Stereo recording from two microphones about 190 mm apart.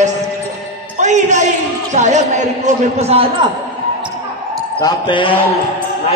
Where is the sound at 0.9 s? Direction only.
40° right (ahead or behind).